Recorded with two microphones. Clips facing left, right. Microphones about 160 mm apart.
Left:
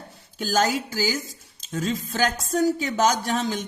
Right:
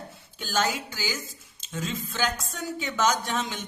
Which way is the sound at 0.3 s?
40° left (ahead or behind).